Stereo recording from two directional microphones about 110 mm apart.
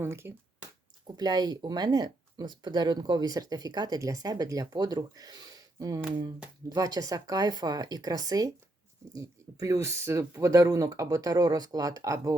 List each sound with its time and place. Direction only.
0.0 s speech: 25° right (ahead or behind)
1.0 s speech: 40° right (ahead or behind)